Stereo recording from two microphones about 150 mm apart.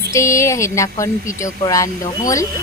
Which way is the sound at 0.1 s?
20° left (ahead or behind).